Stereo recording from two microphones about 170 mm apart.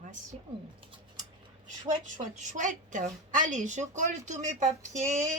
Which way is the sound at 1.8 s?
45° right (ahead or behind).